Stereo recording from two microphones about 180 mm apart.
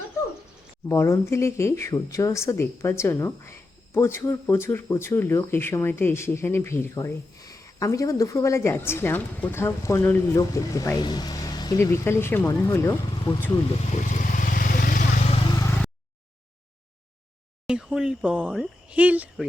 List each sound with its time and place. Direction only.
0.9 s speech: 15° left (ahead or behind)
13.9 s vehicle: 45° left (ahead or behind)
17.7 s speech: 5° right (ahead or behind)